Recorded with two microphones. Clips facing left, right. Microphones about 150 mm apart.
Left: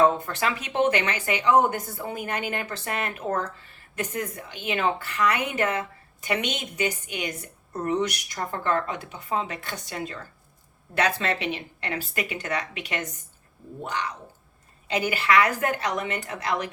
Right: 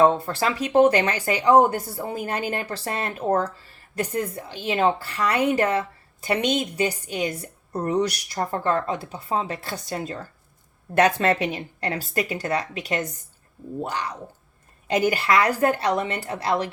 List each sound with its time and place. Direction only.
0.2 s a woman's voice: 35° right (ahead or behind)